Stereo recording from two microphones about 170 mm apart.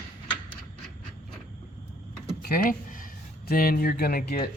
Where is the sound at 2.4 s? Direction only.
60° left (ahead or behind).